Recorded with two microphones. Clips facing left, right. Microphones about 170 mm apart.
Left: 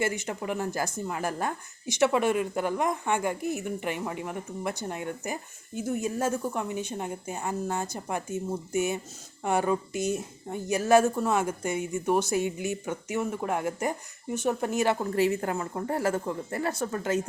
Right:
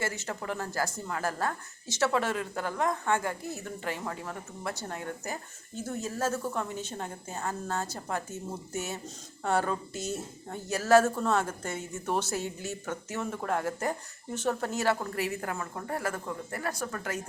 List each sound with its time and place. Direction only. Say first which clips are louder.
0.0 s a woman's voice: left 5 dB; 15° left (ahead or behind)